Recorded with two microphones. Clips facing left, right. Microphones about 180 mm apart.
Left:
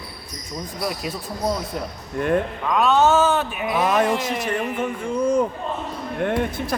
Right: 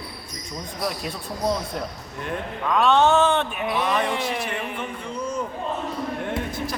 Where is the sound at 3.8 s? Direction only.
45° left (ahead or behind).